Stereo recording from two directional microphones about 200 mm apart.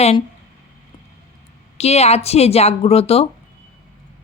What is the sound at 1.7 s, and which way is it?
Speech, 30° left (ahead or behind).